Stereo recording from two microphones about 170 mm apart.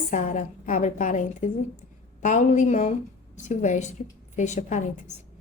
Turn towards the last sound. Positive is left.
turn(degrees=45)  # may be behind; listen again after turning